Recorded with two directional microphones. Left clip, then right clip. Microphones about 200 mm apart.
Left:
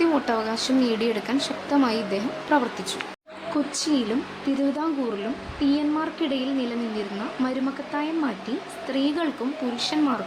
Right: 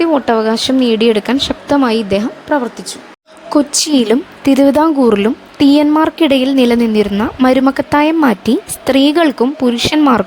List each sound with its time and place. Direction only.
0.0 s speech: 40° right (ahead or behind)
2.5 s speech: 30° right (ahead or behind)
3.5 s a woman's voice: 55° right (ahead or behind)